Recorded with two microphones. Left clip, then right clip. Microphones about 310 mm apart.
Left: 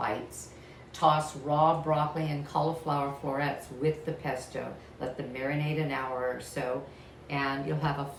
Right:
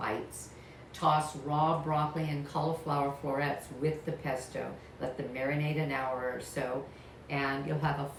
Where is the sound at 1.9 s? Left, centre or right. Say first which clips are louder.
Left 3 dB; centre.